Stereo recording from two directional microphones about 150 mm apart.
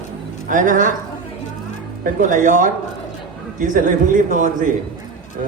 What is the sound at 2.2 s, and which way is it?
A man's voice, 60° right (ahead or behind).